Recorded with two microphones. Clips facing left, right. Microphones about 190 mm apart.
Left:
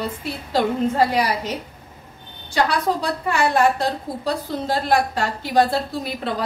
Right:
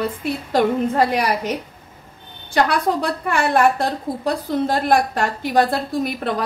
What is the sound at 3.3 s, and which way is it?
A woman's voice, 55° right (ahead or behind).